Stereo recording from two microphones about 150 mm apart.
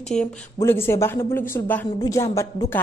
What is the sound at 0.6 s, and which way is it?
A woman's voice, 15° left (ahead or behind).